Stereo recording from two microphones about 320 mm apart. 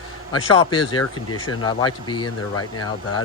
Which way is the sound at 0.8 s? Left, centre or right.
Left.